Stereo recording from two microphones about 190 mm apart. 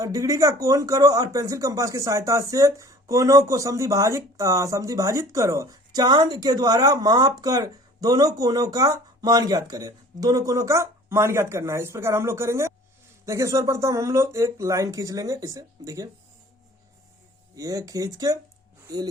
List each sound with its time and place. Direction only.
0.0 s speech: 15° right (ahead or behind)
17.5 s speech: 20° right (ahead or behind)